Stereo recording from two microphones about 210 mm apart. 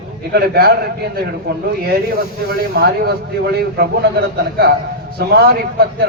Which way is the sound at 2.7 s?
50° right (ahead or behind).